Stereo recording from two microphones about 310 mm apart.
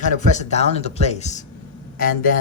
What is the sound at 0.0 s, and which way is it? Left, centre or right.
A man's voice, left.